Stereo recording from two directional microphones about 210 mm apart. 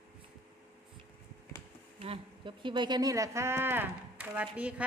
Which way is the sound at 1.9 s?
30° right (ahead or behind).